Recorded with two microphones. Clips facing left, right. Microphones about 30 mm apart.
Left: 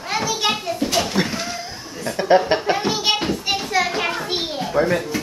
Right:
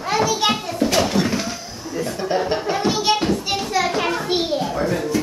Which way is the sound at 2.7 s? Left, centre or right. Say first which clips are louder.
Right 1 dB; centre.